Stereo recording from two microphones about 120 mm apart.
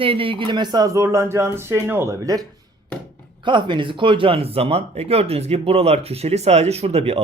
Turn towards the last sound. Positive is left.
turn(degrees=-60)  # may be behind; listen again after turning